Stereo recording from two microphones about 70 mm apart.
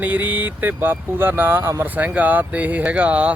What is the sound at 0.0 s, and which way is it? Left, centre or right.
Speech, right.